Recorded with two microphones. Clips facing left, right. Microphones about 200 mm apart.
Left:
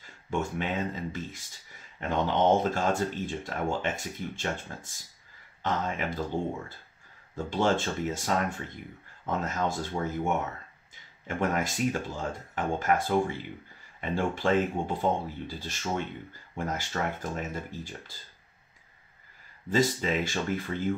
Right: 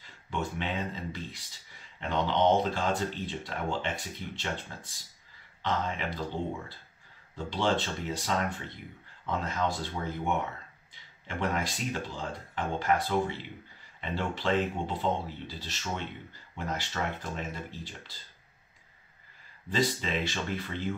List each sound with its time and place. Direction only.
0.0 s speech: 45° left (ahead or behind)
7.3 s speech: 45° left (ahead or behind)
19.7 s speech: 45° left (ahead or behind)